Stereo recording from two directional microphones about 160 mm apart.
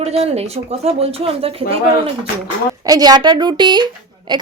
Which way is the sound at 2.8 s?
25° right (ahead or behind).